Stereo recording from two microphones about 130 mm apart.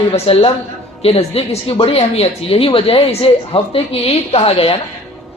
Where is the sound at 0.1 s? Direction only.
50° left (ahead or behind).